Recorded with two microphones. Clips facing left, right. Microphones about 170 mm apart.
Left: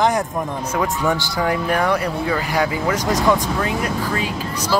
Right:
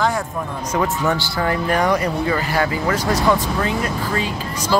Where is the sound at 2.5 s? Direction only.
15° left (ahead or behind).